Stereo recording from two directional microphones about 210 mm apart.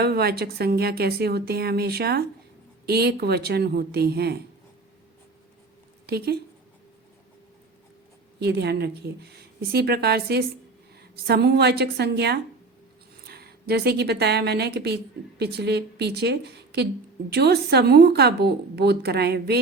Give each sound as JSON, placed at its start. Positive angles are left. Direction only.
{"t": 0.0, "sound": "speech", "side_deg": -50}
{"t": 6.1, "sound": "speech", "side_deg": -50}
{"t": 8.4, "sound": "a woman's voice", "side_deg": -55}